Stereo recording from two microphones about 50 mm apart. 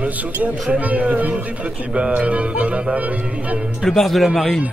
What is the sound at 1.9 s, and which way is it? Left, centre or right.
Music, right.